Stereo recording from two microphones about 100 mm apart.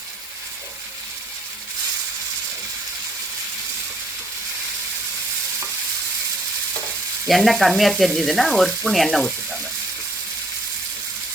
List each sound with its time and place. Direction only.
7.3 s sizzle: centre (ahead or behind)